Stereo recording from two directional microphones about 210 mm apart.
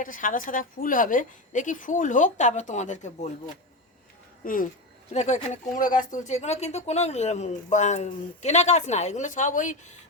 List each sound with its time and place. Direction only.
0.0 s speech: 40° left (ahead or behind)